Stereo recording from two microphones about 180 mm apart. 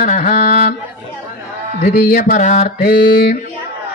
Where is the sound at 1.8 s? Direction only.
55° left (ahead or behind).